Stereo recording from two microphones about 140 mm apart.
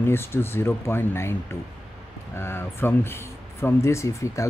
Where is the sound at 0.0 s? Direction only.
15° left (ahead or behind).